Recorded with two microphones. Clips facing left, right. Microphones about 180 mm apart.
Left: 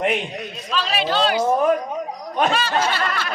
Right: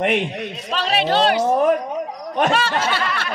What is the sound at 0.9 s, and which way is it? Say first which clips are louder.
Speech: right 3 dB; 65° right (ahead or behind).